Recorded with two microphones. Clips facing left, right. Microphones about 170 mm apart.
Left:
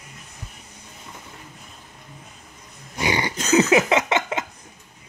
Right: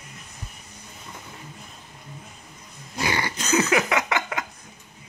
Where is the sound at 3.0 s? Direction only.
20° left (ahead or behind).